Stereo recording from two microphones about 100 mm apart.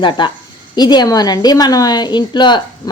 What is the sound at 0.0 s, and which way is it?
A woman's voice, 50° left (ahead or behind).